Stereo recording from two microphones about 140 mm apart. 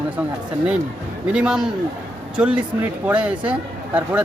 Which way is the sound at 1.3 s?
5° right (ahead or behind).